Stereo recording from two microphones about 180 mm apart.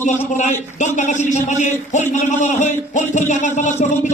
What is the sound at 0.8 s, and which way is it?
A man's voice, 40° left (ahead or behind).